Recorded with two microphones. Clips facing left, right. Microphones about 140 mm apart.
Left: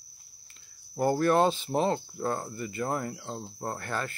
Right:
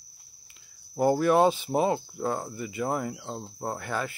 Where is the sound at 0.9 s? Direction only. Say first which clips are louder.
Right 2 dB; 10° right (ahead or behind).